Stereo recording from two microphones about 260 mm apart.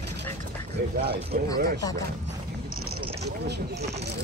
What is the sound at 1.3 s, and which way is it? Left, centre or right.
Speech, right.